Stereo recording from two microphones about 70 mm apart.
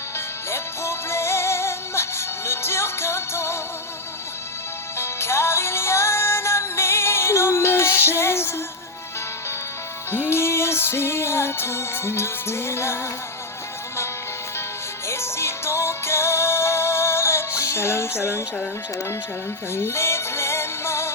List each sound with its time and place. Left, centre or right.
0.5 s music: left
4.9 s music: left
10.1 s music: left
15.0 s music: left
19.7 s music: left